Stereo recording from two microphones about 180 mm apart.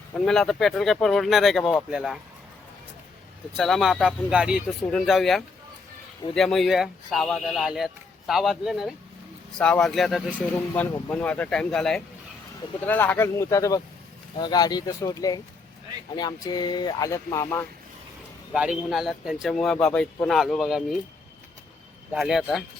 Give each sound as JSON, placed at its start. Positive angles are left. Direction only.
{"t": 0.1, "sound": "speech", "side_deg": 0}
{"t": 3.6, "sound": "speech", "side_deg": 0}
{"t": 18.5, "sound": "speech", "side_deg": -5}
{"t": 22.1, "sound": "speech", "side_deg": 0}